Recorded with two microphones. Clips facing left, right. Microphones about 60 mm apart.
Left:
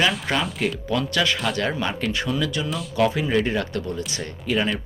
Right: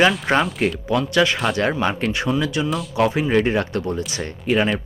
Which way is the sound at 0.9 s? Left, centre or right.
Right.